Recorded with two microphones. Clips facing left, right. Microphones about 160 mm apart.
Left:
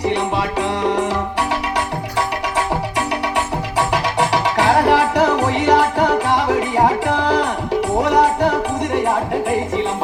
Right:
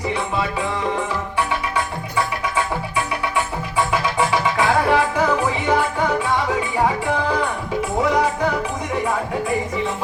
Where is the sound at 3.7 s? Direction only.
75° left (ahead or behind).